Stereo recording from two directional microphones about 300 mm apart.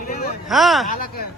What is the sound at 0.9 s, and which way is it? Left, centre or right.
Speech, left.